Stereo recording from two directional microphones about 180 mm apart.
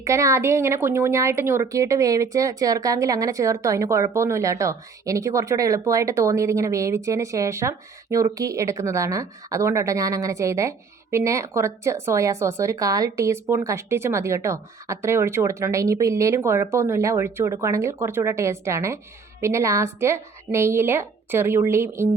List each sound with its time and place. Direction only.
0.0 s speech: 15° right (ahead or behind)